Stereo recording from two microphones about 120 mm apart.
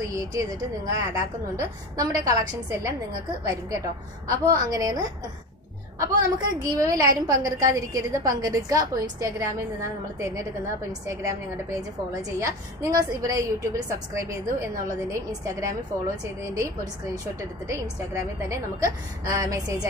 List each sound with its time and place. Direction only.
0.1 s a woman's voice: 30° right (ahead or behind)
17.1 s a woman's voice: 25° right (ahead or behind)